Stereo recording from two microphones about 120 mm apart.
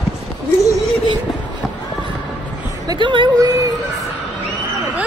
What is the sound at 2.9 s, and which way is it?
Speech, 40° right (ahead or behind).